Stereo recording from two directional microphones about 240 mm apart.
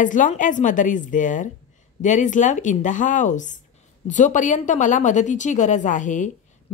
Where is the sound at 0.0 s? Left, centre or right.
Left.